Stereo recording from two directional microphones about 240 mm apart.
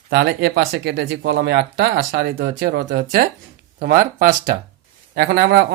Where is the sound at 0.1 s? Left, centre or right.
Right.